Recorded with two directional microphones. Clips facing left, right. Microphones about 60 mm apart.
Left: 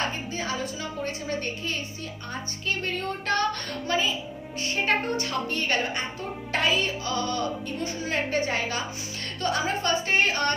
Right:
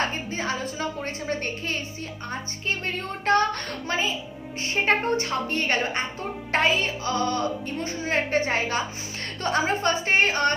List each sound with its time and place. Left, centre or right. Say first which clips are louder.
0.3 s a woman's voice: right 2 dB; right